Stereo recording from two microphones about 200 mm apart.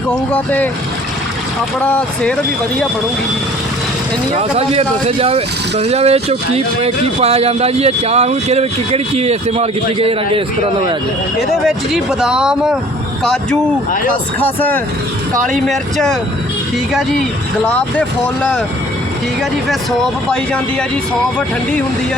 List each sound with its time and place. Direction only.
0.3 s speech: 10° left (ahead or behind)
1.8 s speech: 5° left (ahead or behind)
4.4 s speech: 30° right (ahead or behind)
12.2 s speech: 5° right (ahead or behind)